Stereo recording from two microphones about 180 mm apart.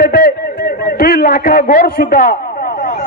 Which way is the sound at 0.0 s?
55° left (ahead or behind).